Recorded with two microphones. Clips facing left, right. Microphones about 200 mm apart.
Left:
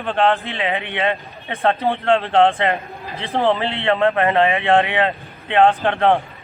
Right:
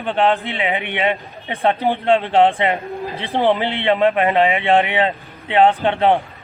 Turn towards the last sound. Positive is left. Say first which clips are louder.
# right 1 dB
turn(degrees=-15)  # may be behind; listen again after turning